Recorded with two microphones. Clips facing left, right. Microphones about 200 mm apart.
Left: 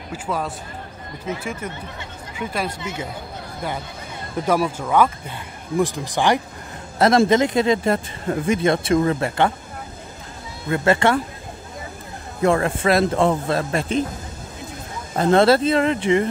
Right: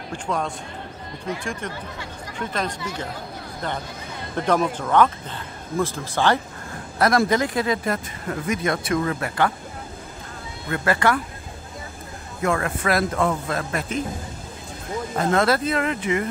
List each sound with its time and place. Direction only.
0.1 s speech: 5° left (ahead or behind)
4.4 s speech: 10° left (ahead or behind); by 9.5 s 25° left (ahead or behind)
10.7 s speech: 25° left (ahead or behind)
12.4 s speech: 30° left (ahead or behind)
15.1 s speech: 30° left (ahead or behind)